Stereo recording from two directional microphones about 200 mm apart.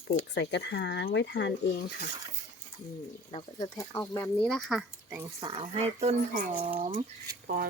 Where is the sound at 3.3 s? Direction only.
30° left (ahead or behind).